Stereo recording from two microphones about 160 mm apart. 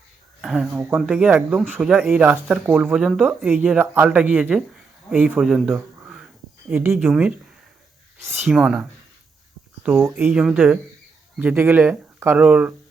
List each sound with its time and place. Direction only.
0.4 s speech: centre (ahead or behind)
8.4 s speech: 5° right (ahead or behind)